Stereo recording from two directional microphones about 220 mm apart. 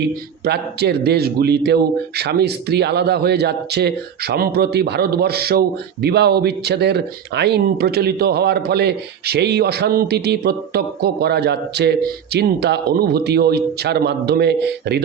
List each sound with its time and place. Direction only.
0.0 s a man's voice: 50° right (ahead or behind)